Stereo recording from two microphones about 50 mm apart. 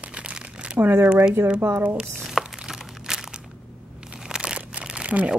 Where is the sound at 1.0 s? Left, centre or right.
Right.